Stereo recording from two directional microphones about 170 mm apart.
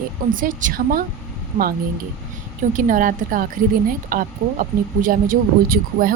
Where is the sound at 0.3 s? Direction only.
50° right (ahead or behind).